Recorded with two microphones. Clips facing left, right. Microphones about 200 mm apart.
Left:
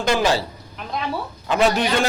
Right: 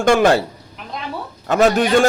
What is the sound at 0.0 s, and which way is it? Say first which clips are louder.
Speech: right 6 dB; 50° right (ahead or behind).